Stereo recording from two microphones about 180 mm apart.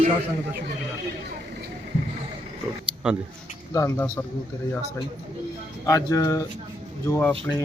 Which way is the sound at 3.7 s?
10° left (ahead or behind).